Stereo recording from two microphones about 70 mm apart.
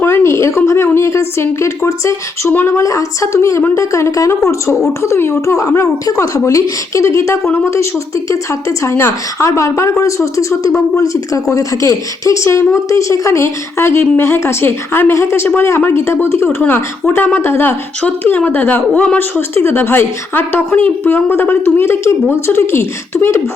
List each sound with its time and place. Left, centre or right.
0.0 s a woman's voice: left
2.5 s speech: left
2.7 s a woman's voice: left